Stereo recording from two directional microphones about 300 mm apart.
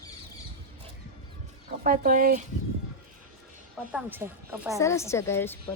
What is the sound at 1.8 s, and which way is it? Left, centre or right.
Speech, right.